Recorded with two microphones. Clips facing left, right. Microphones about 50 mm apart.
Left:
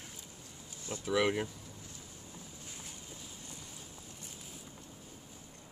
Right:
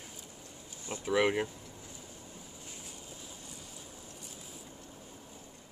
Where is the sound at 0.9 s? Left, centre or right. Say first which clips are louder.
Right 2 dB; centre.